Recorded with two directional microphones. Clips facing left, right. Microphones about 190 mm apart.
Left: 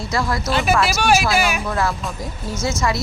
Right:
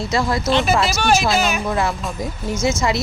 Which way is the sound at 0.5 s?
10° left (ahead or behind).